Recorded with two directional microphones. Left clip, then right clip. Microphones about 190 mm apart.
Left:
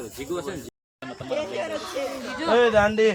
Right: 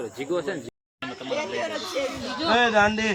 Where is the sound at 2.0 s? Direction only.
45° right (ahead or behind).